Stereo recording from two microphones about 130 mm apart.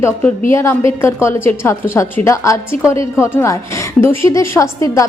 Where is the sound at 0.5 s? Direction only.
20° left (ahead or behind).